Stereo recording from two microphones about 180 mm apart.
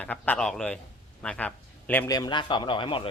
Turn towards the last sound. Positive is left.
turn(degrees=30)  # may be behind; listen again after turning